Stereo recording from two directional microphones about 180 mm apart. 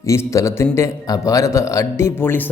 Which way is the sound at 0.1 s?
15° left (ahead or behind).